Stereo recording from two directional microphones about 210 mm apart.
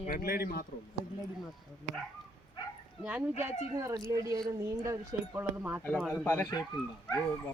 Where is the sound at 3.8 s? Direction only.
15° right (ahead or behind).